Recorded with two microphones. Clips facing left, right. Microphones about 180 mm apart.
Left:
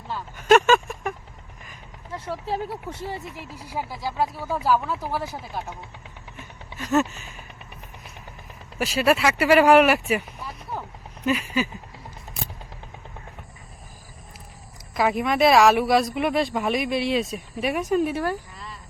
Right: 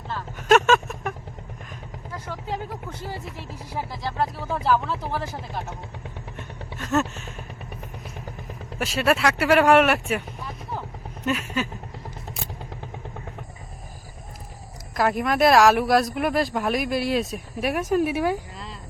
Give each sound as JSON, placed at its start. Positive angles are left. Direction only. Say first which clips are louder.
{"t": 0.3, "sound": "a sound", "louder": "left 1 dB", "side_deg": 0}
{"t": 2.1, "sound": "speech", "louder": "left 3 dB", "side_deg": 30}
{"t": 3.8, "sound": "speech", "louder": "left 1 dB", "side_deg": 5}
{"t": 6.7, "sound": "speech", "louder": "left 2 dB", "side_deg": 0}
{"t": 8.8, "sound": "speech", "louder": "left 1 dB", "side_deg": 0}
{"t": 14.9, "sound": "speech", "louder": "even", "side_deg": 0}